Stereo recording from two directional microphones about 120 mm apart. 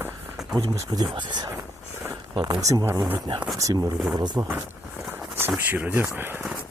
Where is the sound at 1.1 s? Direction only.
40° right (ahead or behind).